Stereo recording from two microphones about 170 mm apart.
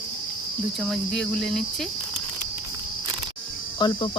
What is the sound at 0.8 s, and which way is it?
Cricket, centre (ahead or behind).